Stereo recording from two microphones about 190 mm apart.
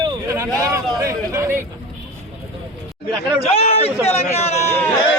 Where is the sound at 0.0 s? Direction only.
20° right (ahead or behind).